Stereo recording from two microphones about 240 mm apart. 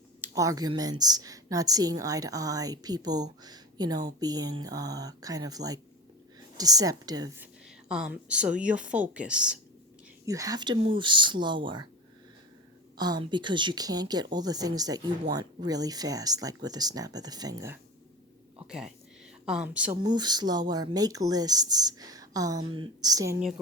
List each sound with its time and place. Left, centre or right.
0.2 s a woman's voice: centre
7.9 s speech: centre
13.0 s a woman's voice: centre
19.5 s speech: centre
20.0 s a woman's voice: centre